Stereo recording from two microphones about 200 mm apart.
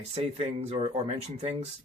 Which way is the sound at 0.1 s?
30° right (ahead or behind).